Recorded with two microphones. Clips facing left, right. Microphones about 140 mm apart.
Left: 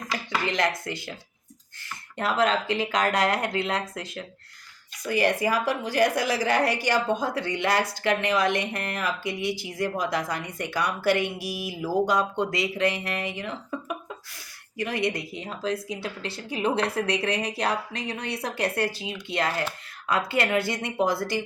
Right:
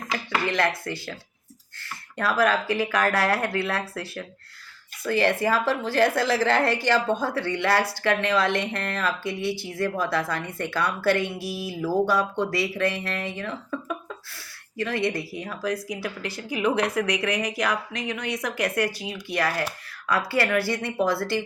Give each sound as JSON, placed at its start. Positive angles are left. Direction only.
{"t": 0.4, "sound": "a woman's voice", "side_deg": 20}
{"t": 2.1, "sound": "a woman's voice", "side_deg": 25}